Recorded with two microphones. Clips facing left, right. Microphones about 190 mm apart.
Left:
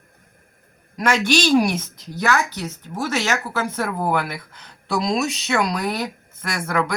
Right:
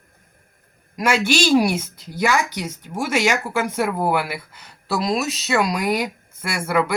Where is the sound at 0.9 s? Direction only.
10° right (ahead or behind).